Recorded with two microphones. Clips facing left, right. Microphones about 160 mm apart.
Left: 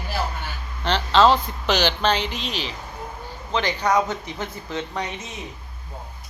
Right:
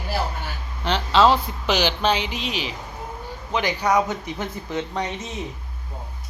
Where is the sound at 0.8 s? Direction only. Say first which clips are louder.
Even; 5° right (ahead or behind).